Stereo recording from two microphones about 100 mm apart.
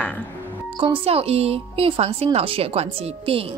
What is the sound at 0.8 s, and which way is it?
A woman's voice, 65° right (ahead or behind).